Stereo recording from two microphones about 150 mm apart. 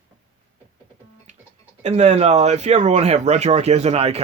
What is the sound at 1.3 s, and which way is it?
Music, 55° right (ahead or behind).